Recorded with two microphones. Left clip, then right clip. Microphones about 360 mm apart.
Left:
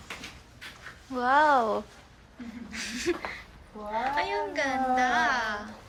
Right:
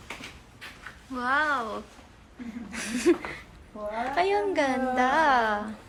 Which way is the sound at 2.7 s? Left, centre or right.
Centre.